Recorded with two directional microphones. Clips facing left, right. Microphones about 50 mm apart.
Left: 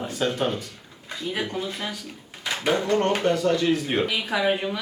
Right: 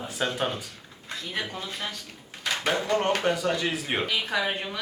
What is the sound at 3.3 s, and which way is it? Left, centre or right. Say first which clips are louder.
Speech: left 5 dB; centre.